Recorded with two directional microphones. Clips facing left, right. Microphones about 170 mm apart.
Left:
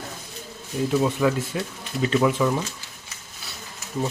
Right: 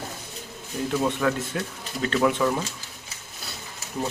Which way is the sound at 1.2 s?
10° left (ahead or behind).